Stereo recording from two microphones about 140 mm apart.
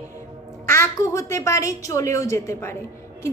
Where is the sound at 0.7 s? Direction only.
20° left (ahead or behind).